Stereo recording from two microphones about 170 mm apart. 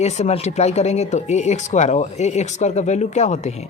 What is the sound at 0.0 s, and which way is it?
Speech, 40° left (ahead or behind).